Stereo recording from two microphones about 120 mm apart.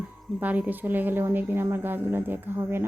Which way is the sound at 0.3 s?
15° right (ahead or behind).